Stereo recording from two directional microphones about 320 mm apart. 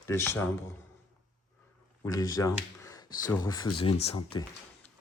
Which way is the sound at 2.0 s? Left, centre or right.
Centre.